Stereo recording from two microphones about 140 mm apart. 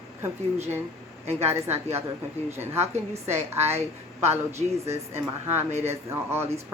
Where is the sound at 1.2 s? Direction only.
50° right (ahead or behind).